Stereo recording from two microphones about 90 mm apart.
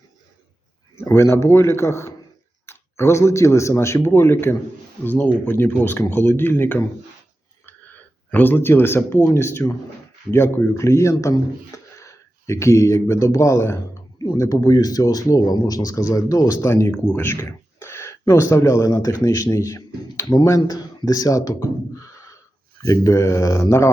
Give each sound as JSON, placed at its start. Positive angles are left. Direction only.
{"t": 0.9, "sound": "speech", "side_deg": 30}
{"t": 8.3, "sound": "speech", "side_deg": 20}